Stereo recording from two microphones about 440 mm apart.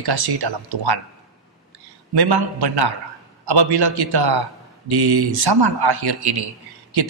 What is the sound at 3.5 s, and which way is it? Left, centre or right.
A man's voice, right.